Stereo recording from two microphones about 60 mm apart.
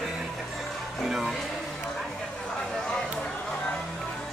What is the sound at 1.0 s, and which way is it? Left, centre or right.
Music, centre.